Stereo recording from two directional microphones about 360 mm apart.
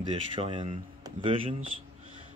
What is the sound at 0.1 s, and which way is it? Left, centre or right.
Speech, centre.